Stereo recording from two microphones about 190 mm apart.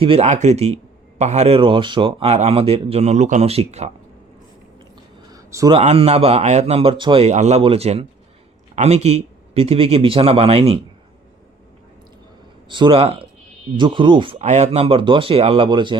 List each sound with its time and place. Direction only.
0.0 s speech: 30° right (ahead or behind)
5.3 s a sound: 15° right (ahead or behind)
5.7 s speech: 30° right (ahead or behind)
12.6 s speech: 25° right (ahead or behind)
14.3 s speech: 35° right (ahead or behind)